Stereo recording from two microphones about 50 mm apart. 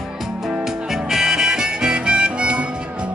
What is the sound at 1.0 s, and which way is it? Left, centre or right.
Harmonica, centre.